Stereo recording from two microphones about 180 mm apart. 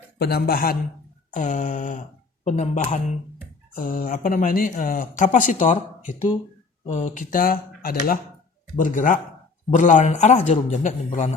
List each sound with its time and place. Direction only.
0.2 s speech: 60° left (ahead or behind)
1.3 s a man's voice: 45° left (ahead or behind)